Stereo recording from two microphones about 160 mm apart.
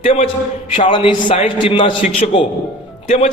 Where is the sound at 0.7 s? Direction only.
35° left (ahead or behind).